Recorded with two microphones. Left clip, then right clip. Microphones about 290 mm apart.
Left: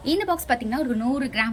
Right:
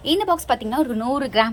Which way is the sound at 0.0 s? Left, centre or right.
Right.